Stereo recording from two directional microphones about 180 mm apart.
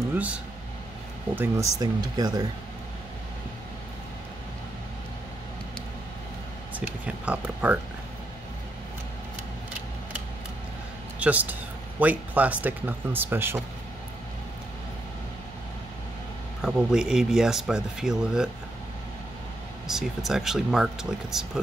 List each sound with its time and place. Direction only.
0.1 s a sound: 10° right (ahead or behind)
1.3 s speech: 10° right (ahead or behind)
1.8 s speech: 20° right (ahead or behind)
6.7 s speech: 5° right (ahead or behind)
11.1 s speech: 10° right (ahead or behind)
16.6 s speech: 5° right (ahead or behind)
19.9 s speech: centre (ahead or behind)